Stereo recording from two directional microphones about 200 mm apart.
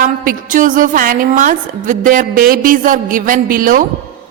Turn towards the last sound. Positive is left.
turn(degrees=-45)  # may be behind; listen again after turning